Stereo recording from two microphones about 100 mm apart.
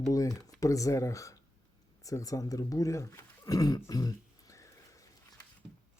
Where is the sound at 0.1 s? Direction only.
35° left (ahead or behind).